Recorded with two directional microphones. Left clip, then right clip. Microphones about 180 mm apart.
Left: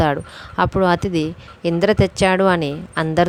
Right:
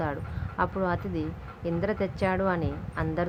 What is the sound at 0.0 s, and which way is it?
Speech, 55° left (ahead or behind).